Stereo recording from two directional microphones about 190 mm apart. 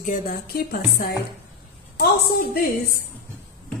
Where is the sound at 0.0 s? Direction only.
45° left (ahead or behind).